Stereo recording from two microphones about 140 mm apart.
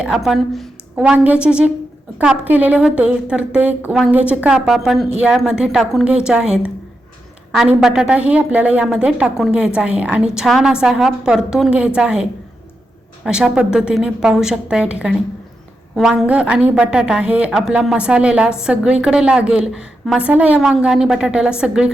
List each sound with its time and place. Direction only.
0.0 s a woman's voice: centre (ahead or behind)
13.2 s a woman's voice: 5° right (ahead or behind)